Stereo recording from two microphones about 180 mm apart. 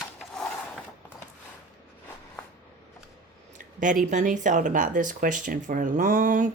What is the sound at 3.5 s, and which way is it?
Speech, 45° right (ahead or behind).